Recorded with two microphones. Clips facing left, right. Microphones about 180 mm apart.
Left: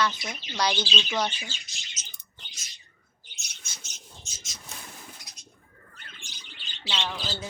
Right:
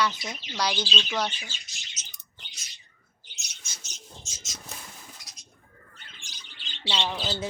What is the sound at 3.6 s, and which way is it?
Bird, 60° left (ahead or behind).